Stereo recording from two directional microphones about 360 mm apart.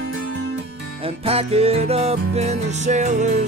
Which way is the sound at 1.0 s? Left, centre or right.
Centre.